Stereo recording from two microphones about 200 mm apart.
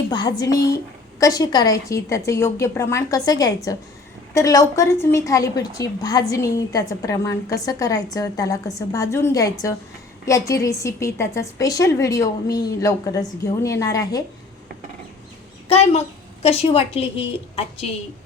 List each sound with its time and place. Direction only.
0.1 s a woman's voice: 20° left (ahead or behind)
15.7 s a woman's voice: 30° left (ahead or behind)